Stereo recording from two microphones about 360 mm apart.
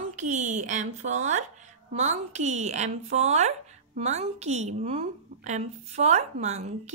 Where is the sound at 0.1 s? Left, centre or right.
Centre.